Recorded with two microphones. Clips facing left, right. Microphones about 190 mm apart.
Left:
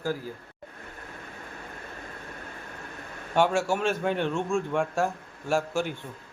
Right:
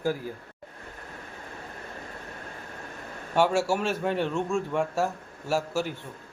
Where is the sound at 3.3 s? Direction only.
5° right (ahead or behind).